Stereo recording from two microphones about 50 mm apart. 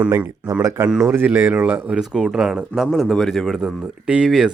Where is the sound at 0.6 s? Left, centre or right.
Right.